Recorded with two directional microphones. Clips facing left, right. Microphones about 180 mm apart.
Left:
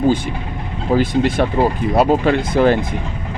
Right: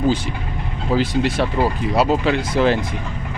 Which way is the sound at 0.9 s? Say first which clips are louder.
Left 3 dB; 50° left (ahead or behind).